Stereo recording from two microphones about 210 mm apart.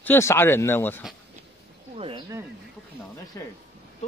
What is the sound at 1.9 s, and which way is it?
Speech, 25° right (ahead or behind).